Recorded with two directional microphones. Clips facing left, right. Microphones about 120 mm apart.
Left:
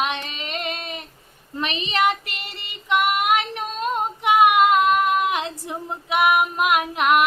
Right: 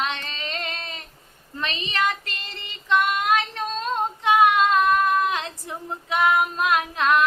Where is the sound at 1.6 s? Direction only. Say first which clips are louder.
Left 4 dB; 20° left (ahead or behind).